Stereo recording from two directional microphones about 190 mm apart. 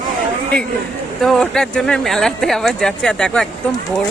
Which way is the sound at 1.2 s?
Centre (ahead or behind).